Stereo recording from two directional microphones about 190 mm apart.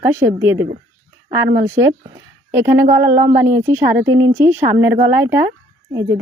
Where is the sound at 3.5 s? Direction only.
15° right (ahead or behind).